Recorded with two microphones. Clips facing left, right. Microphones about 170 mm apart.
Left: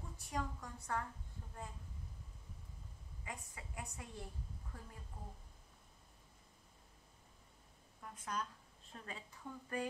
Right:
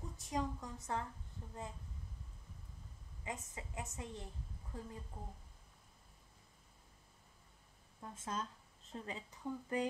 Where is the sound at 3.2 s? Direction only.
20° right (ahead or behind).